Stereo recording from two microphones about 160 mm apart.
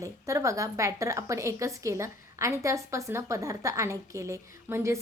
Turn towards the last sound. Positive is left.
turn(degrees=-15)  # may be behind; listen again after turning